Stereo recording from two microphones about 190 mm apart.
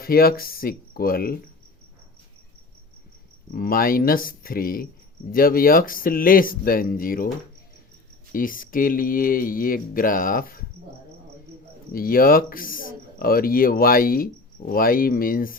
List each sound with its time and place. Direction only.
0.0 s speech: 50° left (ahead or behind)
3.5 s speech: 50° left (ahead or behind)
8.3 s speech: 45° left (ahead or behind)
11.9 s speech: 50° left (ahead or behind)